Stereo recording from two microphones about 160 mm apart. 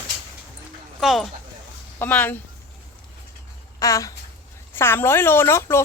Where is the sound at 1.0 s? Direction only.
Centre (ahead or behind).